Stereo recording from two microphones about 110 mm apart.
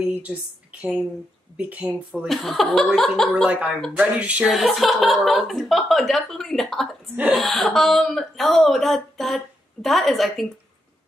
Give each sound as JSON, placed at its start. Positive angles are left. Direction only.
{"t": 0.0, "sound": "speech", "side_deg": -15}
{"t": 1.6, "sound": "speech", "side_deg": -15}
{"t": 2.2, "sound": "speech", "side_deg": 0}
{"t": 3.4, "sound": "speech", "side_deg": -15}